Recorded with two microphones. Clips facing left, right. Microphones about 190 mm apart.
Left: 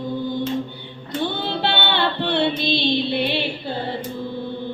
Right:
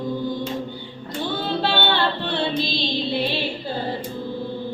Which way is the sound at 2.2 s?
65° left (ahead or behind).